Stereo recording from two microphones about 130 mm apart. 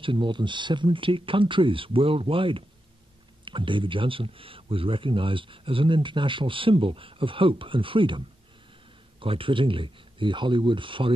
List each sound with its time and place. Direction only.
0.0 s speech: 40° right (ahead or behind)
9.2 s speech: 45° right (ahead or behind)